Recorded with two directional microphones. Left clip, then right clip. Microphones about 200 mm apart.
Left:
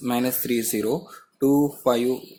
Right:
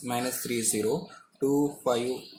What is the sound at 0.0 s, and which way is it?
Speech, 50° left (ahead or behind).